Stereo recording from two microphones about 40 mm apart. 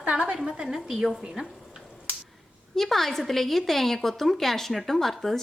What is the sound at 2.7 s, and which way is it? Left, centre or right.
A woman's voice, centre.